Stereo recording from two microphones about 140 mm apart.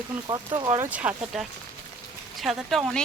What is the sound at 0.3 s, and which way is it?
Speech, 30° right (ahead or behind).